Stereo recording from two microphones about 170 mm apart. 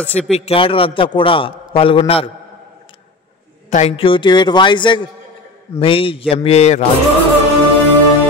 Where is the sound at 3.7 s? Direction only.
35° left (ahead or behind).